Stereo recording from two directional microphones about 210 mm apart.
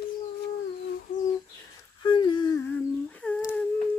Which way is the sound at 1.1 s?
35° left (ahead or behind).